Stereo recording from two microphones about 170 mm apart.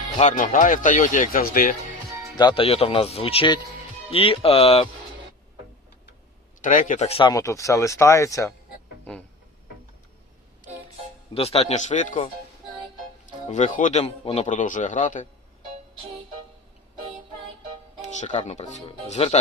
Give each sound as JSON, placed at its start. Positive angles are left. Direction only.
{"t": 0.2, "sound": "a man's voice", "side_deg": 45}
{"t": 2.3, "sound": "speech", "side_deg": 25}
{"t": 6.6, "sound": "a man's voice", "side_deg": 50}
{"t": 7.2, "sound": "speech", "side_deg": 20}
{"t": 9.1, "sound": "music", "side_deg": 5}
{"t": 11.3, "sound": "speech", "side_deg": 35}
{"t": 13.5, "sound": "a man's voice", "side_deg": 45}
{"t": 18.2, "sound": "a man's voice", "side_deg": 45}